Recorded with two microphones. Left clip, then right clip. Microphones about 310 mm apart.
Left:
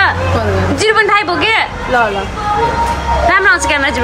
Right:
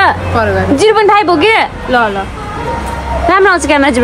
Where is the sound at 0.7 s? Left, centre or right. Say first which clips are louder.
Right 3 dB; centre.